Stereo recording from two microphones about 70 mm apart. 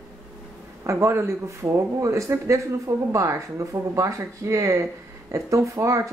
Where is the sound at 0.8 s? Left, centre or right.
Right.